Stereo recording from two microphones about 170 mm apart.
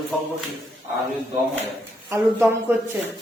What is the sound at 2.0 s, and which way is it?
Speech, 15° right (ahead or behind).